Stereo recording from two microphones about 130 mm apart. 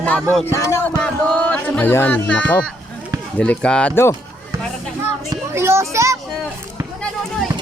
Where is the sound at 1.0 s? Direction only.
5° left (ahead or behind).